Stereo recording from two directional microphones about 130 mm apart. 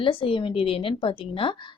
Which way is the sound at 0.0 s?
40° left (ahead or behind).